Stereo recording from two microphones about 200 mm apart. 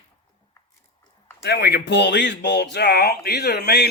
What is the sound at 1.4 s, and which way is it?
A man's voice, 55° left (ahead or behind).